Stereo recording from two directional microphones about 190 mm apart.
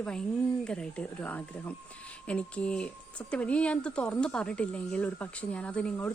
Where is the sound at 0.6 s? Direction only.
5° left (ahead or behind).